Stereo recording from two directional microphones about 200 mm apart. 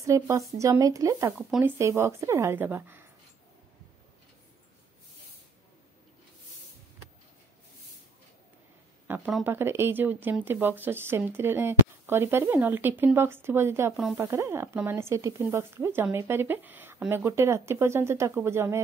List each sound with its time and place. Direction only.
0.0 s speech: 15° right (ahead or behind)
9.0 s speech: 10° right (ahead or behind)